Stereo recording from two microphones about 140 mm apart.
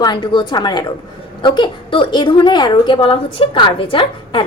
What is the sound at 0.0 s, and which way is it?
A woman's voice, 30° left (ahead or behind).